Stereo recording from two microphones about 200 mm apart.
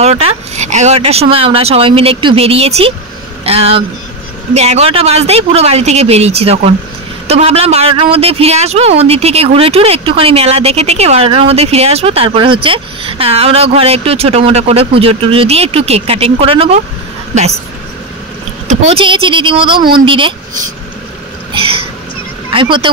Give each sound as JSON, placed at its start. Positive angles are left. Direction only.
{"t": 0.0, "sound": "speech", "side_deg": -30}
{"t": 18.9, "sound": "speech", "side_deg": -25}
{"t": 21.5, "sound": "speech", "side_deg": -25}